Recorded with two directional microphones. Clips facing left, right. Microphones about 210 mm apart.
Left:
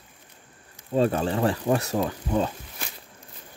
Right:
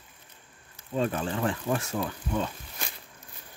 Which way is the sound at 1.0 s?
35° left (ahead or behind).